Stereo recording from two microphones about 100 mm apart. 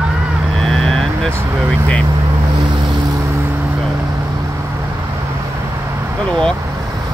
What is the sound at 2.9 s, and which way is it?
Vehicle, 40° right (ahead or behind).